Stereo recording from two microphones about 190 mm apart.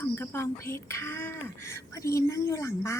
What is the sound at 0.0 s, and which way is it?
A woman's voice, 10° left (ahead or behind).